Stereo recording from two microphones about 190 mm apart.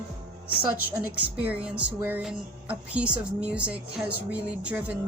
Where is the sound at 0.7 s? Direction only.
10° right (ahead or behind).